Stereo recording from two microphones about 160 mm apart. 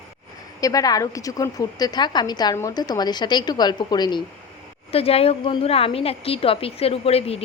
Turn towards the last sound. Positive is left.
turn(degrees=40)  # may be behind; listen again after turning